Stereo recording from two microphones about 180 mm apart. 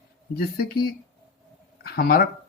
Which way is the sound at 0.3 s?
60° left (ahead or behind).